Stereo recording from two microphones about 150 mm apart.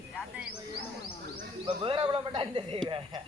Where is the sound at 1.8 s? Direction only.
30° right (ahead or behind).